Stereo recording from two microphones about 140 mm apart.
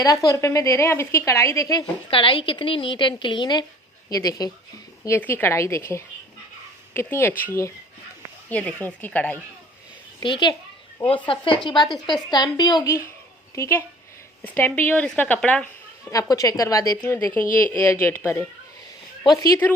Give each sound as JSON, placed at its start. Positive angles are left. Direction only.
{"t": 0.0, "sound": "speech", "side_deg": 25}
{"t": 2.0, "sound": "a woman's voice", "side_deg": 40}
{"t": 10.2, "sound": "a woman's voice", "side_deg": 35}
{"t": 16.1, "sound": "a woman's voice", "side_deg": 25}